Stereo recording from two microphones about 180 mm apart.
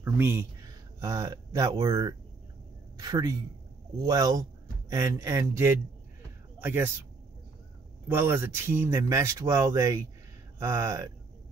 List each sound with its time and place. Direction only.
0.0 s speech: 15° right (ahead or behind)
8.1 s speech: 10° right (ahead or behind)